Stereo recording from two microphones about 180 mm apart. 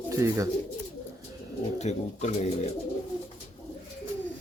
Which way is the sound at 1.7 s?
35° left (ahead or behind).